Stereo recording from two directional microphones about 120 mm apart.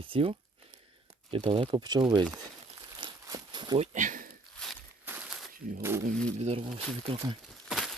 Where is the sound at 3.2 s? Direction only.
35° right (ahead or behind).